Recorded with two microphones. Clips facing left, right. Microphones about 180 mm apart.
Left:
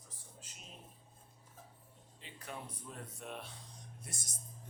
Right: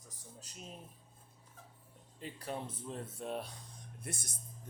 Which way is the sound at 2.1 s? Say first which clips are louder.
Right 7 dB; 40° right (ahead or behind).